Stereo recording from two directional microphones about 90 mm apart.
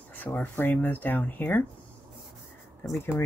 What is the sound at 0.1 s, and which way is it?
Speech, 20° left (ahead or behind).